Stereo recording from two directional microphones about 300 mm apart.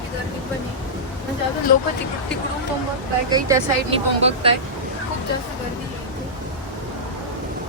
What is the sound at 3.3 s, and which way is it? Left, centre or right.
Speech, centre.